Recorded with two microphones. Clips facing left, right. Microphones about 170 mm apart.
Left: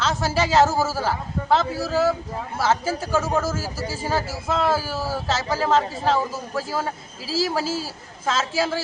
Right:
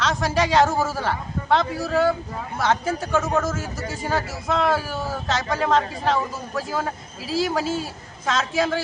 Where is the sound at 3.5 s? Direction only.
30° left (ahead or behind).